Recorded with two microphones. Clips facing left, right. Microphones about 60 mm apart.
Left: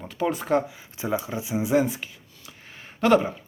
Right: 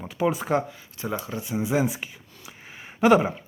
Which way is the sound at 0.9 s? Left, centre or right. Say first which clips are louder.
Left 3 dB; centre.